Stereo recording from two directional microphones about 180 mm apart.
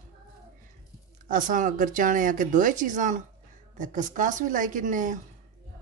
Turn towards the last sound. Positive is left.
turn(degrees=-45)  # may be behind; listen again after turning